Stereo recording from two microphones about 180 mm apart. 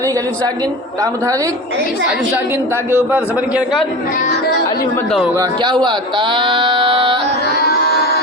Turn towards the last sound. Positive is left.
turn(degrees=60)  # may be behind; listen again after turning